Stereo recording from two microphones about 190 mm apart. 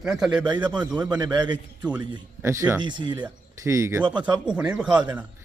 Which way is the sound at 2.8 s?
25° right (ahead or behind).